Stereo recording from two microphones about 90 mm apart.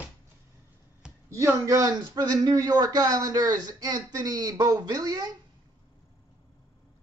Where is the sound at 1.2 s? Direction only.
35° right (ahead or behind).